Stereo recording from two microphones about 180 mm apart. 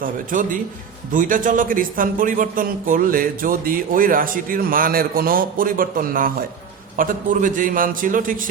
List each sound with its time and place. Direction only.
0.0 s speech: 50° right (ahead or behind)